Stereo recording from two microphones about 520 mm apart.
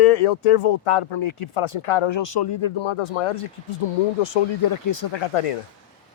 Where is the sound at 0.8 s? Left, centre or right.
Left.